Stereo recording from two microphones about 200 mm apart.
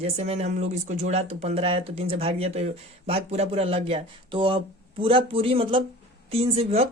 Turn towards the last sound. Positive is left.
turn(degrees=-30)  # may be behind; listen again after turning